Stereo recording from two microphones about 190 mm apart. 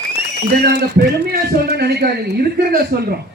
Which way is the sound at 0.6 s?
55° right (ahead or behind).